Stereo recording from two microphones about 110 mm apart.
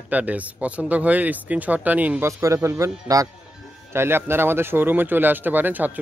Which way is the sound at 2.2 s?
25° right (ahead or behind).